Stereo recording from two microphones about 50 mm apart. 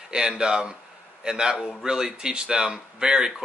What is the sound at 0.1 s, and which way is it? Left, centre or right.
Speech, centre.